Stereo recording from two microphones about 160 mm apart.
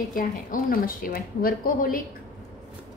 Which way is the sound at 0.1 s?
60° left (ahead or behind).